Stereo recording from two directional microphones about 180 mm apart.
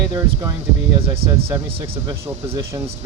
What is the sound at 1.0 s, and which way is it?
Speech, 30° right (ahead or behind).